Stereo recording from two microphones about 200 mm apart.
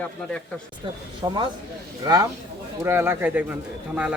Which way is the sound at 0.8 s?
25° right (ahead or behind).